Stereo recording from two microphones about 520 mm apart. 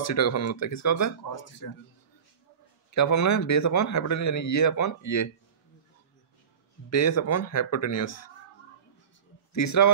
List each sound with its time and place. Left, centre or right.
0.0 s speech: left
2.9 s speech: left
6.9 s speech: left
9.5 s speech: left